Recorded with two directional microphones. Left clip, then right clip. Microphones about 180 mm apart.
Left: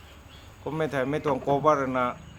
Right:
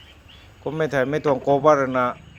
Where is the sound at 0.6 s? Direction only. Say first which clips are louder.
Right 6 dB; 25° right (ahead or behind).